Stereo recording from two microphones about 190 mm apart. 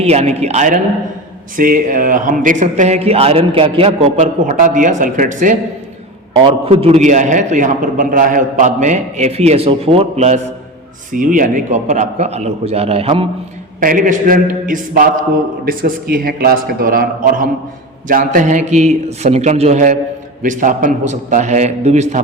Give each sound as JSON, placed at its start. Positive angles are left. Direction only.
{"t": 0.0, "sound": "a man's voice", "side_deg": -35}
{"t": 6.3, "sound": "a man's voice", "side_deg": -30}
{"t": 13.7, "sound": "a man's voice", "side_deg": -45}